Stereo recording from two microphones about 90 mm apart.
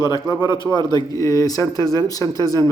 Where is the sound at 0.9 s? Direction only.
40° left (ahead or behind).